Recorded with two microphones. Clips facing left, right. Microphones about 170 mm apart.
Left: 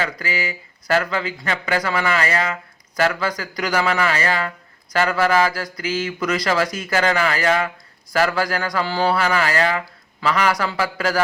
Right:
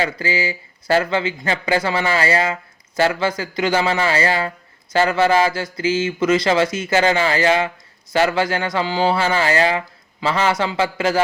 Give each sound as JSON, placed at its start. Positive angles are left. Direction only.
{"t": 0.0, "sound": "speech", "side_deg": -30}